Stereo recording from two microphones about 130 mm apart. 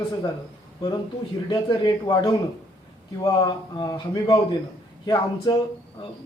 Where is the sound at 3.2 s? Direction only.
35° left (ahead or behind).